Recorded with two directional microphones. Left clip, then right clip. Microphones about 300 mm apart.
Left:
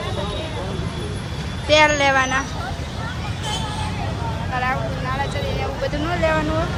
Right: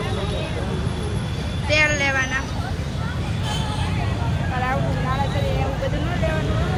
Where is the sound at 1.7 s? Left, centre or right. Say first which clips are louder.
Left 4 dB; centre.